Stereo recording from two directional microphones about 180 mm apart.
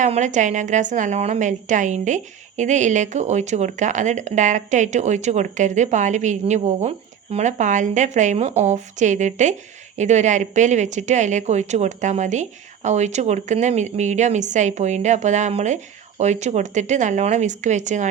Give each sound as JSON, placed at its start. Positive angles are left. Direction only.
{"t": 0.0, "sound": "a woman's voice", "side_deg": -40}